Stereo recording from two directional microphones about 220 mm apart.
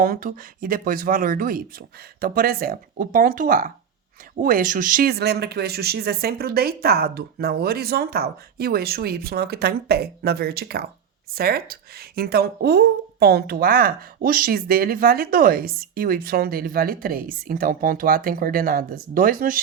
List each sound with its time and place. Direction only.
0.0 s speech: 40° right (ahead or behind)